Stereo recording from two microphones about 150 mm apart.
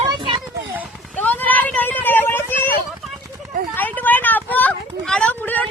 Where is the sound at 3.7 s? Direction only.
10° left (ahead or behind).